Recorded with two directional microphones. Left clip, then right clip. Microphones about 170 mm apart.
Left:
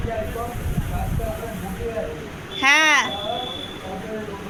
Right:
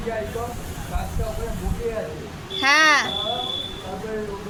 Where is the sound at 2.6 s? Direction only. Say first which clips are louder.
Even; 35° right (ahead or behind).